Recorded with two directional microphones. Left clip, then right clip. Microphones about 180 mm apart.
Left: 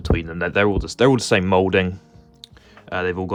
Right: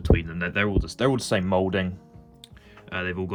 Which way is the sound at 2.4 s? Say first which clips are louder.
Left 5 dB; 25° left (ahead or behind).